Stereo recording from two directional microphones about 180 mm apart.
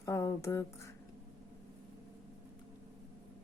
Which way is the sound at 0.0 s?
15° left (ahead or behind).